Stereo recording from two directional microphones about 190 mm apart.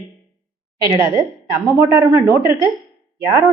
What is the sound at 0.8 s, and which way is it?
A woman's voice, 15° right (ahead or behind).